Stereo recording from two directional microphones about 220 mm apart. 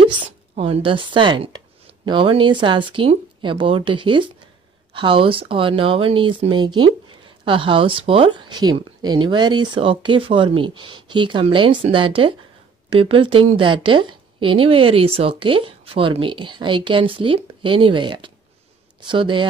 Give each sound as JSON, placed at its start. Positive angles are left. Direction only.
{"t": 0.6, "sound": "a woman's voice", "side_deg": -25}